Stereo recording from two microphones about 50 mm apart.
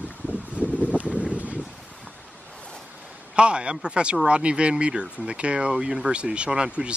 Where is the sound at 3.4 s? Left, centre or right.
Right.